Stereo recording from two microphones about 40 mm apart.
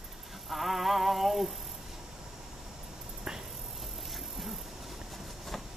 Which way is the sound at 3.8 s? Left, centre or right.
Centre.